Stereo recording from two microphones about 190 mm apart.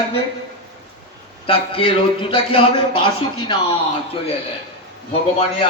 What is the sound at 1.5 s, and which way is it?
A man's voice, 25° left (ahead or behind).